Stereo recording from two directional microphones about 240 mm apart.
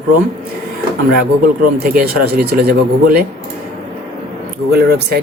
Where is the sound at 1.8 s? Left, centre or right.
Right.